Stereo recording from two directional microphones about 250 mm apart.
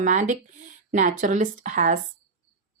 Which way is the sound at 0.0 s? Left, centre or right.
Right.